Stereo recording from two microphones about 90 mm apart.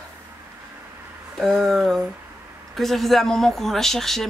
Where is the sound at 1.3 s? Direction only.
Centre (ahead or behind).